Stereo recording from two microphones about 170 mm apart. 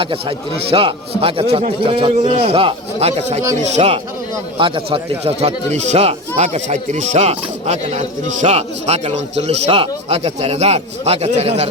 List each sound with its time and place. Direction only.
0.0 s speech: 30° right (ahead or behind)